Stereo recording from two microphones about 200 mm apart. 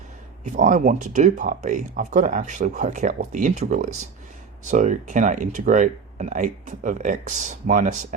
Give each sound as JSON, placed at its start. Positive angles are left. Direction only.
{"t": 0.4, "sound": "speech", "side_deg": -40}